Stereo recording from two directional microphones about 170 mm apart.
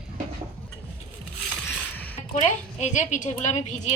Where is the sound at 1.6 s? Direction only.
10° left (ahead or behind).